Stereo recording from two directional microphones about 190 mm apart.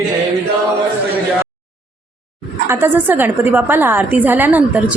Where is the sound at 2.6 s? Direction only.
10° right (ahead or behind).